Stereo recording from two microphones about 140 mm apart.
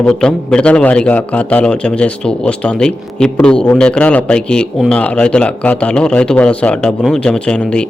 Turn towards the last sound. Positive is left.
turn(degrees=5)  # may be behind; listen again after turning